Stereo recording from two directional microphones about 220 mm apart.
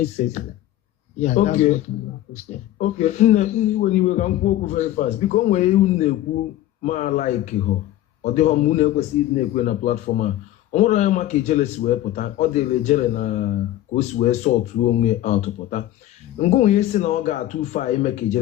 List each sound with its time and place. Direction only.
1.2 s a man's voice: 35° left (ahead or behind)